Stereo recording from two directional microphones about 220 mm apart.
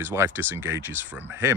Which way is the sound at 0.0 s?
10° right (ahead or behind).